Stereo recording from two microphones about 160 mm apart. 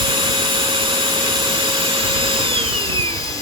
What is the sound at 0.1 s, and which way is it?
Vacuum cleaner, 30° right (ahead or behind).